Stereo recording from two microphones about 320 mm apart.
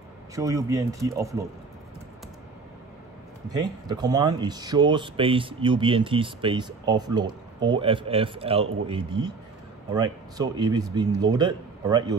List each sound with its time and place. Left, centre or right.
0.4 s speech: centre
3.4 s speech: centre